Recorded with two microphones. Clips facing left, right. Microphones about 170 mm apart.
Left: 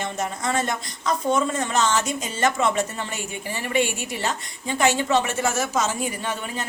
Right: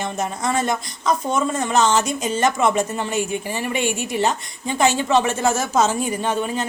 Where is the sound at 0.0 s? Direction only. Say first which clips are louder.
Right 3 dB; 15° right (ahead or behind).